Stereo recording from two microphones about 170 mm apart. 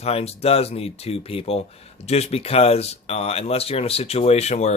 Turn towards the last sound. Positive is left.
turn(degrees=40)  # may be behind; listen again after turning